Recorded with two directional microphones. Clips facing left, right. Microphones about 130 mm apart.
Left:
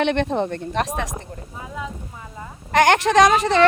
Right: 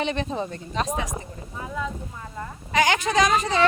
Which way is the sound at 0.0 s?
65° left (ahead or behind).